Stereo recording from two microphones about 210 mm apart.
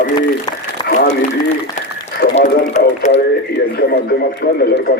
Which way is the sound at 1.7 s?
35° left (ahead or behind).